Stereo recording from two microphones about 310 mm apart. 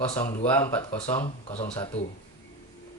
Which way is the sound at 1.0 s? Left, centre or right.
Centre.